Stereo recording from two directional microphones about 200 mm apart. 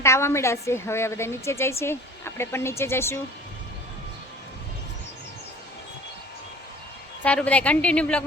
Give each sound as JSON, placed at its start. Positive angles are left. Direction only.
{"t": 0.0, "sound": "a woman's voice", "side_deg": 15}
{"t": 7.2, "sound": "a woman's voice", "side_deg": 5}